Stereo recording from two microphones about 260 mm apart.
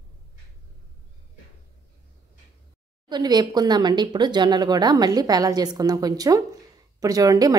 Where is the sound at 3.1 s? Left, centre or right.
Centre.